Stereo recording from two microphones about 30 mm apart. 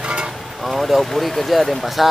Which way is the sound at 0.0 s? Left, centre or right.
Right.